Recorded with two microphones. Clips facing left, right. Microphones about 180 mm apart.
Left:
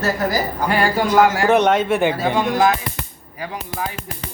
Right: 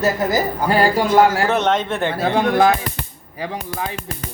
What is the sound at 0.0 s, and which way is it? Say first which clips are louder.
Speech: right 2 dB; 20° right (ahead or behind).